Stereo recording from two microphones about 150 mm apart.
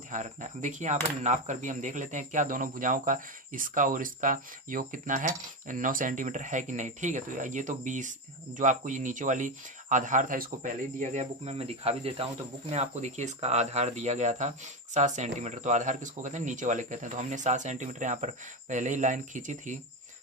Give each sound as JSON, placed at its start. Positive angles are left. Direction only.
{"t": 0.1, "sound": "speech", "side_deg": -55}